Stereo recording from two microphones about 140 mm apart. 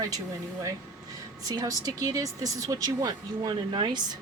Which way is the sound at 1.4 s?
30° right (ahead or behind).